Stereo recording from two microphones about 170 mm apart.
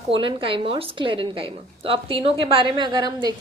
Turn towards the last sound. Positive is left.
turn(degrees=-25)  # may be behind; listen again after turning